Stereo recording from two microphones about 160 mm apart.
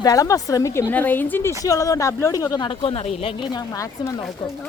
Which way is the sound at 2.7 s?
35° left (ahead or behind).